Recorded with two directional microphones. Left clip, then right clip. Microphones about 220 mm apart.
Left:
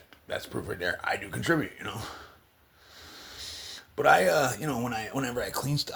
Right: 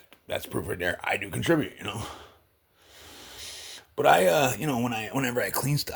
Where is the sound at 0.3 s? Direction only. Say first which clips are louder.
Right 3 dB; 45° right (ahead or behind).